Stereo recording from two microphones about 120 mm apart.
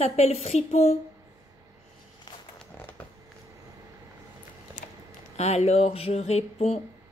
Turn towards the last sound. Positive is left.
turn(degrees=65)  # may be behind; listen again after turning